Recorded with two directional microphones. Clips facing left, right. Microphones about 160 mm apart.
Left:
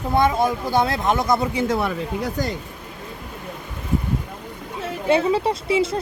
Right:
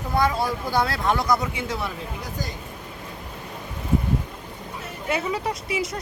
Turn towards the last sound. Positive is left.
turn(degrees=30)  # may be behind; listen again after turning